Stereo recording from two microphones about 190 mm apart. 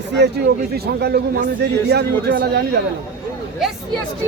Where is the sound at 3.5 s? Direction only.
Centre (ahead or behind).